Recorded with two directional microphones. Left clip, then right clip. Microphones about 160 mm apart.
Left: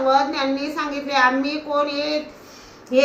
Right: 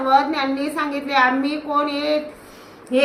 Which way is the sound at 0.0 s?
20° right (ahead or behind).